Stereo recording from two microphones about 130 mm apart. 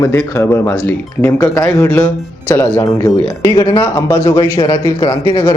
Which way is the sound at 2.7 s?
30° left (ahead or behind).